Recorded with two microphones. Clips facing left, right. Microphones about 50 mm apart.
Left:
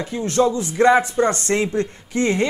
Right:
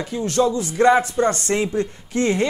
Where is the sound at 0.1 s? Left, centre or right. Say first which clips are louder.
Left 1 dB; centre.